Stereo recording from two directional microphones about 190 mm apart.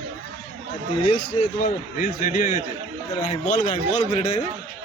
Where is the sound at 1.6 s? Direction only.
45° left (ahead or behind).